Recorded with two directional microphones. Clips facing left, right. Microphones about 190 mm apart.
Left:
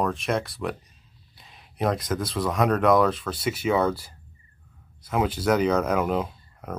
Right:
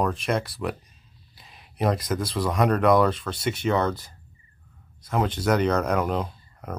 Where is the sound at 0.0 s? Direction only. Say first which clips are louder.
Even; centre (ahead or behind).